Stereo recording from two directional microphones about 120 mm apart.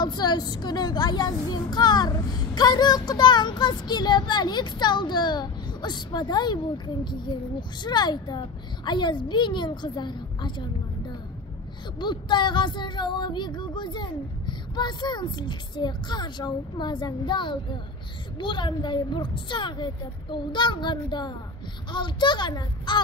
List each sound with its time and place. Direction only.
0.0 s speech: 35° left (ahead or behind)
12.0 s speech: 40° left (ahead or behind)